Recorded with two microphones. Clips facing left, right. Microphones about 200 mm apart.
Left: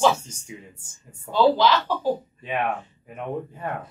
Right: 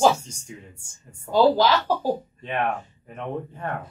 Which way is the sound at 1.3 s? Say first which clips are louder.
Right 1 dB; 40° right (ahead or behind).